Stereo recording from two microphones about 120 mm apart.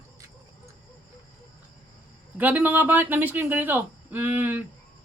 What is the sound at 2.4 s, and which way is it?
Speech, 15° right (ahead or behind).